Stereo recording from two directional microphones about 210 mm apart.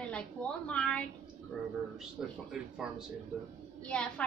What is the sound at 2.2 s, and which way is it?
A woman's voice, centre (ahead or behind).